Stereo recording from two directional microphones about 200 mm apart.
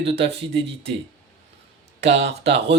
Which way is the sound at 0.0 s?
30° right (ahead or behind).